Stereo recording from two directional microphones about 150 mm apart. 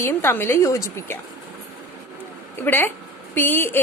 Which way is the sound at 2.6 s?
15° left (ahead or behind).